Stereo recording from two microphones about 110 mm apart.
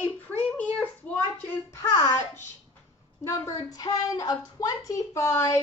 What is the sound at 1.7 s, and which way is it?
Speech, 30° left (ahead or behind).